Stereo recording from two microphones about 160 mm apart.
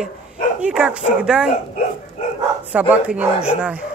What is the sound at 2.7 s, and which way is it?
Speech, 10° right (ahead or behind).